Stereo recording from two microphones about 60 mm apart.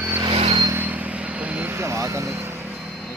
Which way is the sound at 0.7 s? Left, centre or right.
Right.